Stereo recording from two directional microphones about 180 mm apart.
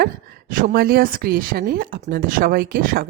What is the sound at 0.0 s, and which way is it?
A woman's voice, 50° right (ahead or behind).